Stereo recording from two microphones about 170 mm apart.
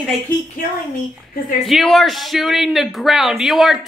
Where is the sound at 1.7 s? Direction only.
Centre (ahead or behind).